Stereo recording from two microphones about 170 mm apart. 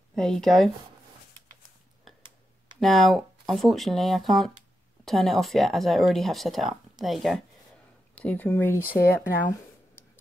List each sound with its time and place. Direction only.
0.1 s speech: 5° left (ahead or behind)
2.8 s speech: centre (ahead or behind)
9.1 s a sound: 15° left (ahead or behind)